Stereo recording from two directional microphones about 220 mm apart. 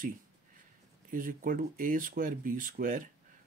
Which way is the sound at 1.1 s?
40° right (ahead or behind).